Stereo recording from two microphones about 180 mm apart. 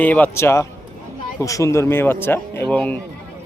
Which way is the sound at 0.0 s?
10° left (ahead or behind).